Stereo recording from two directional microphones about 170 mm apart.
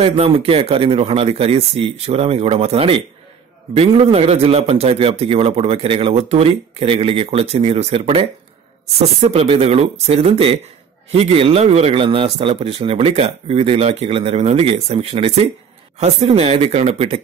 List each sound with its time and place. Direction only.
0.0 s a man's voice: 30° right (ahead or behind)